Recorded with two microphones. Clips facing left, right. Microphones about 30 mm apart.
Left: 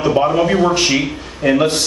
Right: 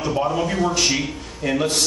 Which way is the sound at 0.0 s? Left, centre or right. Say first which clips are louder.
Left 7 dB; left.